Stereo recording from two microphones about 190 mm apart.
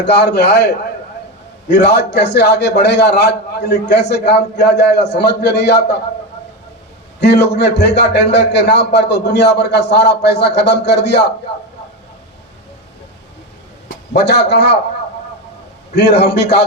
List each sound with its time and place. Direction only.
0.0 s a man's voice: 65° left (ahead or behind)
7.2 s a man's voice: 60° left (ahead or behind)
13.8 s a man's voice: 60° left (ahead or behind)
16.0 s a man's voice: 60° left (ahead or behind)